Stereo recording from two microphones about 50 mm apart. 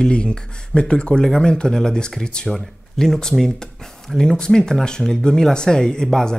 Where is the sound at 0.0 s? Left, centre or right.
Centre.